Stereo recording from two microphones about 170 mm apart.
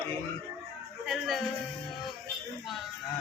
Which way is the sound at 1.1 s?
Centre (ahead or behind).